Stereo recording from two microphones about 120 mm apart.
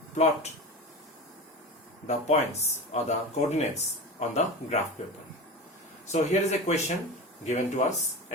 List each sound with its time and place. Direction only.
2.0 s speech: 70° left (ahead or behind)
7.4 s speech: 85° left